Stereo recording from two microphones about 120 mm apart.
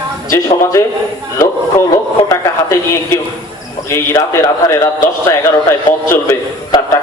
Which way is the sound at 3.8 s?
25° left (ahead or behind).